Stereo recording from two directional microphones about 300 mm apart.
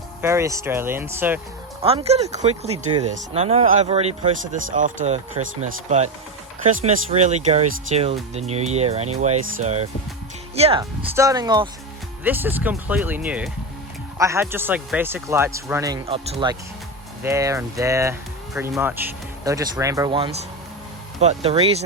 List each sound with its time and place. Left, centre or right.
0.2 s speech: centre
1.8 s speech: centre